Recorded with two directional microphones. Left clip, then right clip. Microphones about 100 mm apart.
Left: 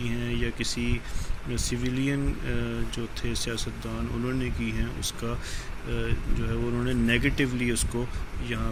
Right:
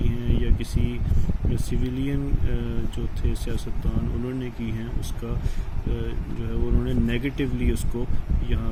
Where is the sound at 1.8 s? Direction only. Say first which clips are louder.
Even; 20° right (ahead or behind).